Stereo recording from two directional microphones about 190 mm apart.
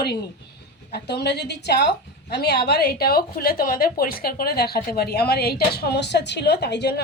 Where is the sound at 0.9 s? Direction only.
60° left (ahead or behind).